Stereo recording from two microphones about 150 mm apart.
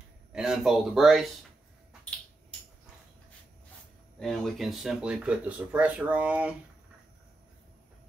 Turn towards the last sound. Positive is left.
turn(degrees=-10)  # may be behind; listen again after turning